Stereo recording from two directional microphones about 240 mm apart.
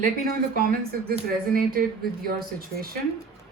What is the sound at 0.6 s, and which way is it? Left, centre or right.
Speech, right.